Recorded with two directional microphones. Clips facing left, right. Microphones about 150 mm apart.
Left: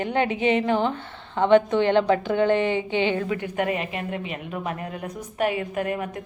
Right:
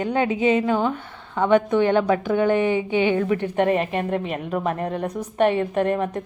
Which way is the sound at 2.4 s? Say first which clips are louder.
Right 2 dB; 15° right (ahead or behind).